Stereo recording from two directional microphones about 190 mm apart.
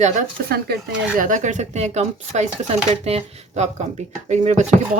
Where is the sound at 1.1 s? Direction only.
45° right (ahead or behind).